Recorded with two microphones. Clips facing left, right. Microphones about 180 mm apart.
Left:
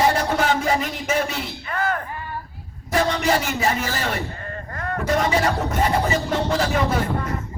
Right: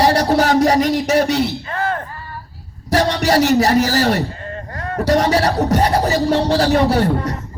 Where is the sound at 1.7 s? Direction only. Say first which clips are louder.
Right 3 dB; 30° right (ahead or behind).